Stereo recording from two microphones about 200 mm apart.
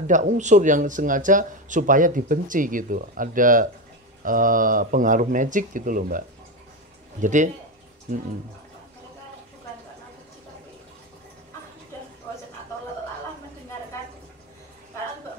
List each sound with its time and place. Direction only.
0.0 s speech: 40° right (ahead or behind)